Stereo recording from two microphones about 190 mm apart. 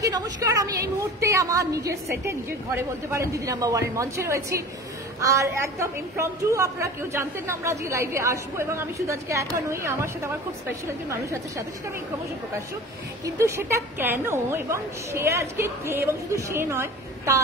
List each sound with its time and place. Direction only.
0.0 s a woman's voice: 20° right (ahead or behind)
13.2 s a woman's voice: 15° right (ahead or behind)